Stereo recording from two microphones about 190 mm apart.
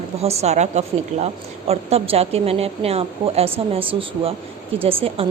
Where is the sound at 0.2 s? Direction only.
35° right (ahead or behind).